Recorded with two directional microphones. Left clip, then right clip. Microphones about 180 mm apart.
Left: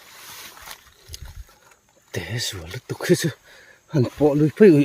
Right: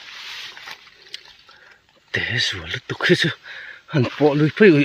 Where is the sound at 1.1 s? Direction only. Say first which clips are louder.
Right 6 dB; 15° left (ahead or behind).